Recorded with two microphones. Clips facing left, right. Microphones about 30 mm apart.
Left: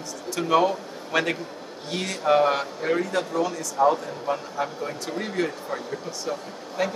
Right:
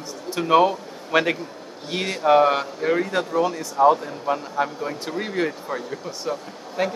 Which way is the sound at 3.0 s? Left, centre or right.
Centre.